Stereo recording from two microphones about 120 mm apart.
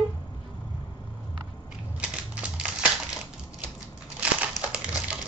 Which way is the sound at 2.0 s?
10° right (ahead or behind).